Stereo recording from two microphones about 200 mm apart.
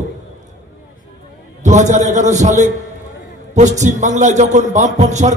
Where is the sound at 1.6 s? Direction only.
35° right (ahead or behind).